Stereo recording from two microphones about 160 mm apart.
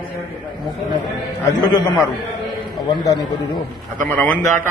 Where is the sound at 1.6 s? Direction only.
25° left (ahead or behind).